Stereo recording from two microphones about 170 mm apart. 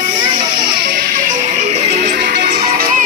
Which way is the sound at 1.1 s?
45° right (ahead or behind).